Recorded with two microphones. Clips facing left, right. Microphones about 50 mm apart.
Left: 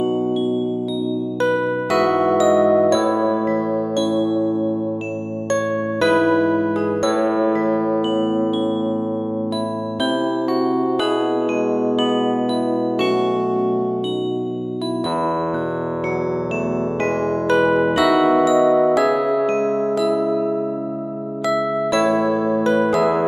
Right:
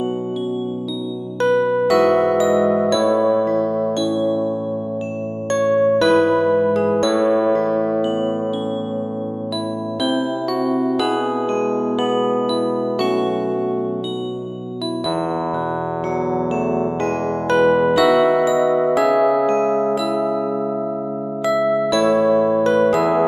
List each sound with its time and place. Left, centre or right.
1.5 s music: centre
5.6 s music: centre
10.0 s music: centre
10.9 s music: centre
17.6 s music: centre
19.6 s glockenspiel: right
19.9 s music: centre
21.5 s music: centre